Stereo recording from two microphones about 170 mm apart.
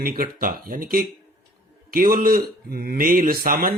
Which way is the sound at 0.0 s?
60° right (ahead or behind).